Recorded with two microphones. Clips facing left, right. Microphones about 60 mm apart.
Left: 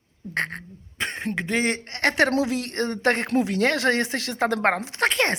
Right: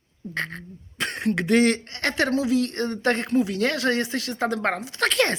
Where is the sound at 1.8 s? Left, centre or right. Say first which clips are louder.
Left 3 dB; left.